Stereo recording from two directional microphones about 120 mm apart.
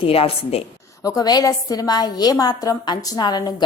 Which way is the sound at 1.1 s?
30° left (ahead or behind).